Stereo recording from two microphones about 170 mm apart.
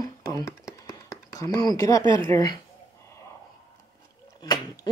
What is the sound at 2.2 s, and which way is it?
Speech, 20° left (ahead or behind).